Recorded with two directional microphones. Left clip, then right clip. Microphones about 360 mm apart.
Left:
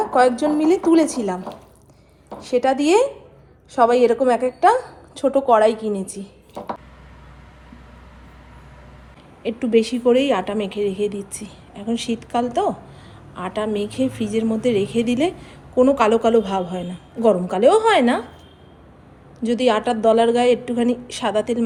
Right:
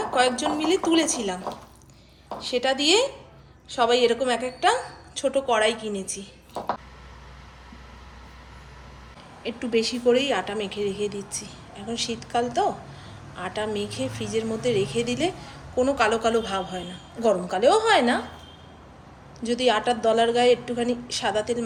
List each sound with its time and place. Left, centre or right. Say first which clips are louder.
0.1 s a woman's voice: left 5 dB; centre
2.4 s a woman's voice: left 5 dB; centre
9.4 s a woman's voice: left 7 dB; centre
19.4 s a woman's voice: left 4 dB; centre